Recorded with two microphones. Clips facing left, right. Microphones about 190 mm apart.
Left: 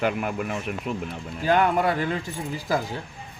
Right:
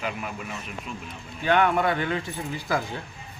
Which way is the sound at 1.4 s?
35° left (ahead or behind).